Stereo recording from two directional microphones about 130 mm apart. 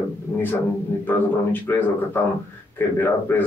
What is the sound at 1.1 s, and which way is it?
Speech, 15° left (ahead or behind).